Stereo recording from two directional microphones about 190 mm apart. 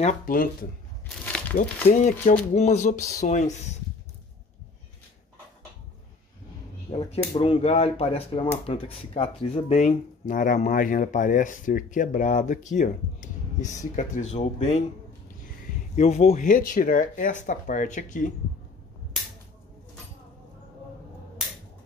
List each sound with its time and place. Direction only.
0.3 s speech: 50° left (ahead or behind)
1.0 s a sound: 5° left (ahead or behind)
1.6 s speech: 40° left (ahead or behind)
6.9 s speech: 30° left (ahead or behind)
16.0 s speech: 35° left (ahead or behind)